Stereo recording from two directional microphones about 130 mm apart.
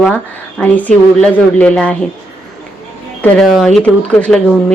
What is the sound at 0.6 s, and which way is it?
A woman's voice, 10° left (ahead or behind).